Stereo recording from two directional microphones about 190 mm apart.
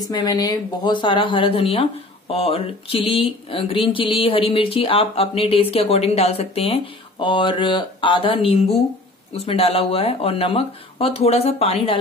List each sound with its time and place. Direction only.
0.1 s speech: 20° left (ahead or behind)